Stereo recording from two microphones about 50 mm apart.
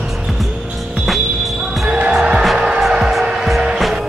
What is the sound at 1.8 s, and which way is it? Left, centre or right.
Basketball bounce, right.